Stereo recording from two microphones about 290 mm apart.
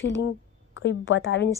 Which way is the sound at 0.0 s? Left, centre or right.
Left.